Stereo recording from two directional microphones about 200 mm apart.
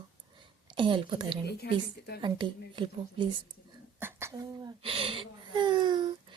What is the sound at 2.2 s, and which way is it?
Speech, 25° right (ahead or behind).